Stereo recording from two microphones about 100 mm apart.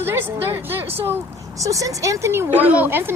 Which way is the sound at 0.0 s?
20° right (ahead or behind).